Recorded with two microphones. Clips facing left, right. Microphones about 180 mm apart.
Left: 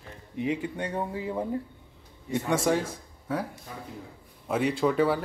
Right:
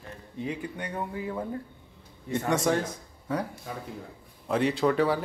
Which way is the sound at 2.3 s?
5° left (ahead or behind).